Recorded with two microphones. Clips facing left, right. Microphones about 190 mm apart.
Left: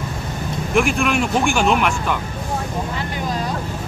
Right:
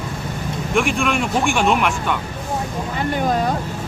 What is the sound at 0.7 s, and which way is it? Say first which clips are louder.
Speech: left 1 dB; centre (ahead or behind).